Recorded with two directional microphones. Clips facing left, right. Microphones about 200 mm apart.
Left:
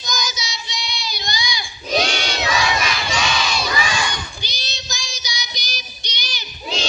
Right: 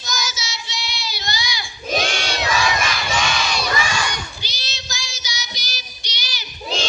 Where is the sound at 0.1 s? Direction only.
15° left (ahead or behind).